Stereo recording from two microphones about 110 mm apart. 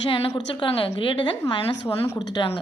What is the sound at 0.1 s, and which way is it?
Speech, 60° left (ahead or behind).